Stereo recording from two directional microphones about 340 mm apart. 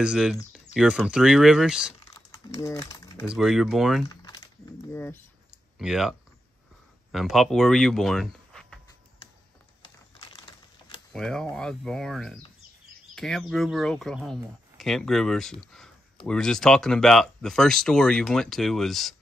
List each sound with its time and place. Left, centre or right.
0.0 s speech: centre
2.1 s typing: centre
3.3 s speech: centre
4.1 s typing: centre
4.9 s speech: centre
9.2 s a sound: centre
11.1 s speech: centre